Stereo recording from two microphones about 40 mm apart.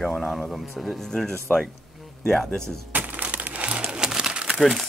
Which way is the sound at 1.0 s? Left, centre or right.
Centre.